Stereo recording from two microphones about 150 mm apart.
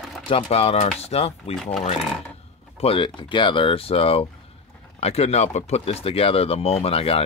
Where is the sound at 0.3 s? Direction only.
40° left (ahead or behind).